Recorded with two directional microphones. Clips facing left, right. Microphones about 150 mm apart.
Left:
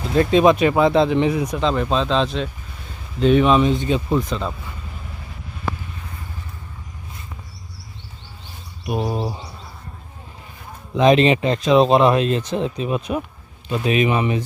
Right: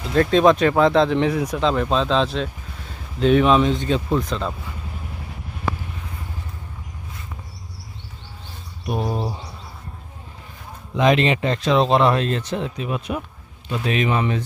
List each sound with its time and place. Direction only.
0.1 s speech: 10° left (ahead or behind)
8.9 s speech: 5° left (ahead or behind)
11.0 s speech: 20° left (ahead or behind)